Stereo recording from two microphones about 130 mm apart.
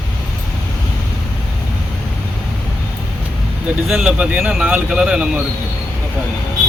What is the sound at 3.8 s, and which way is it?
Speech, 5° right (ahead or behind).